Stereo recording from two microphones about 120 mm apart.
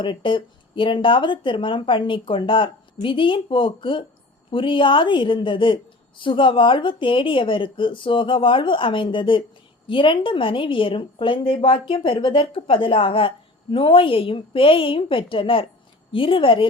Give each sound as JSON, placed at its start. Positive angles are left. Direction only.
{"t": 0.0, "sound": "a woman's voice", "side_deg": 45}